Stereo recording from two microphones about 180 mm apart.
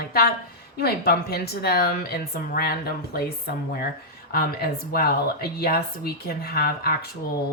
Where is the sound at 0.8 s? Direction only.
60° left (ahead or behind).